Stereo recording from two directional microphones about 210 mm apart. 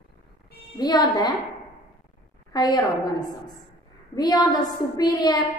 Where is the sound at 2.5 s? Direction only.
20° left (ahead or behind).